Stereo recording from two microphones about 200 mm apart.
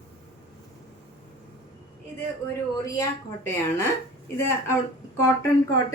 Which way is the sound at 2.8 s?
15° left (ahead or behind).